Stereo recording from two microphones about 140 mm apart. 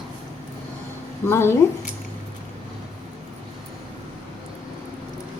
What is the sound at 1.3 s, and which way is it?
Speech, 20° left (ahead or behind).